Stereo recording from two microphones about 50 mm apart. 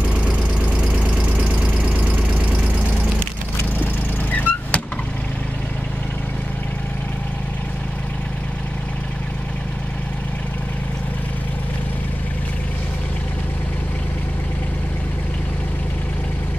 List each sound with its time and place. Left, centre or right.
3.5 s vehicle: left